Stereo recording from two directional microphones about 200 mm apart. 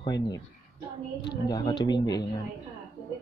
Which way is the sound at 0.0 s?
20° left (ahead or behind).